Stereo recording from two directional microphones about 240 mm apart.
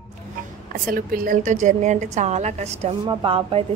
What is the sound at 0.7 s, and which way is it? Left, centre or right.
Speech, right.